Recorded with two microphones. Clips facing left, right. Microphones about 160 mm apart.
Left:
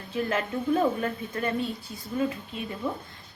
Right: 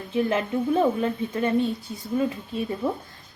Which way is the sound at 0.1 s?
25° right (ahead or behind).